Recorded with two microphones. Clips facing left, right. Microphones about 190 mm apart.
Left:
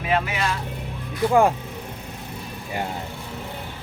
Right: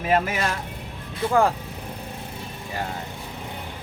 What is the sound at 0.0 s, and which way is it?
Speech, 45° right (ahead or behind).